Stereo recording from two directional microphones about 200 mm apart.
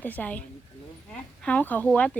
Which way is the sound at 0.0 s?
10° left (ahead or behind).